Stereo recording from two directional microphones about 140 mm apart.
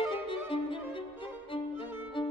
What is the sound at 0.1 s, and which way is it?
Violin, 40° left (ahead or behind).